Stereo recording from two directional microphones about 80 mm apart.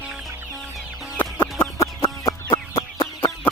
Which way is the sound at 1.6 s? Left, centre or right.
Left.